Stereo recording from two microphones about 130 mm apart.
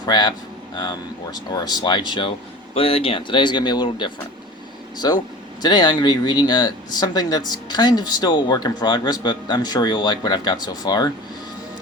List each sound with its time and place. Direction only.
0.0 s speech: 35° left (ahead or behind)